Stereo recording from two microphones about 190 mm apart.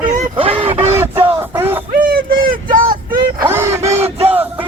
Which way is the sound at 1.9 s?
50° right (ahead or behind).